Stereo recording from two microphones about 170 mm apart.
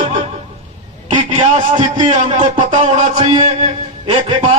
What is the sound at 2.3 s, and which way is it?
Music, 45° right (ahead or behind).